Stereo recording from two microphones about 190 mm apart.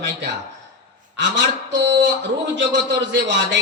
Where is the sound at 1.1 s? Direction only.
70° right (ahead or behind).